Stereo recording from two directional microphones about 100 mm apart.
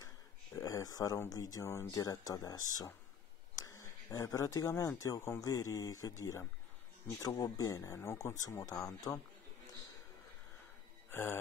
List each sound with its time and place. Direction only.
0.6 s a sound: 35° left (ahead or behind)
1.3 s speech: 35° left (ahead or behind)
11.1 s speech: 25° left (ahead or behind)